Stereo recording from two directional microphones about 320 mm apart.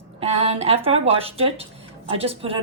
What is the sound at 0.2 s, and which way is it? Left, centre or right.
A man's voice, centre.